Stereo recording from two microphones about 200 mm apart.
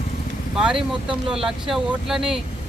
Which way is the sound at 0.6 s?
5° right (ahead or behind).